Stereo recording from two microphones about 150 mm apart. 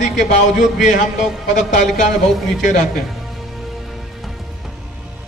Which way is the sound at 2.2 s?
Centre (ahead or behind).